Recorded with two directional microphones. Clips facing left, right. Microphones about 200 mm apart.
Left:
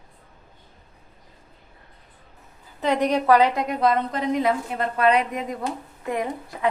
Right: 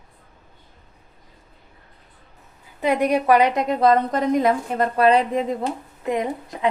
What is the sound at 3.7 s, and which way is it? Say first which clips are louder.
A woman's voice: right 5 dB; 45° right (ahead or behind).